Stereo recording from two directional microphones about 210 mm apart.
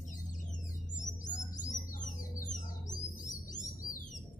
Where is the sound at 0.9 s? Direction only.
35° left (ahead or behind).